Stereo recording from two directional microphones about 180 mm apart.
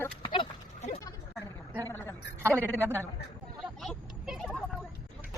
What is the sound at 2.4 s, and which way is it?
Speech, 10° right (ahead or behind).